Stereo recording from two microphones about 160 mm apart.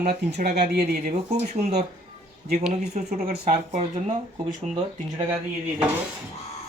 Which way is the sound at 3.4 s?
45° right (ahead or behind).